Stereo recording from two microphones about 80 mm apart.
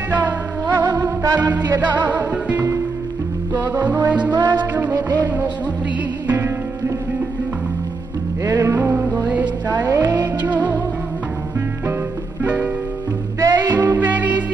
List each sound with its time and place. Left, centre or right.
0.1 s music: right
1.0 s music: right
2.0 s music: centre
3.7 s music: right
4.3 s music: right
6.2 s music: right
8.5 s music: right
8.7 s music: right
9.8 s music: right
10.4 s music: right
12.4 s music: centre
13.4 s music: right
13.9 s music: centre